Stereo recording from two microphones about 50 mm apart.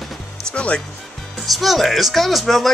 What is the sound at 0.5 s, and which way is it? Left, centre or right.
Speech, left.